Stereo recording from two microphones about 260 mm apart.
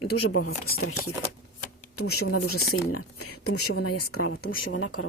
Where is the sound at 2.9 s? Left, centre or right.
Left.